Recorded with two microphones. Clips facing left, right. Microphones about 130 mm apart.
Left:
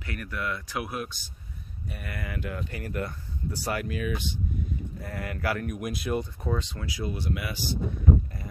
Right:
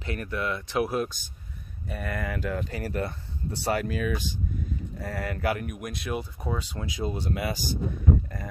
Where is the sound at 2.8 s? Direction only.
30° right (ahead or behind).